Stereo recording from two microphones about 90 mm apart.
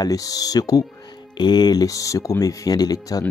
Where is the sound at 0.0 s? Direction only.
40° left (ahead or behind).